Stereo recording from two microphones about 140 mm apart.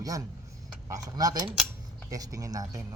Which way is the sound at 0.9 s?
25° right (ahead or behind).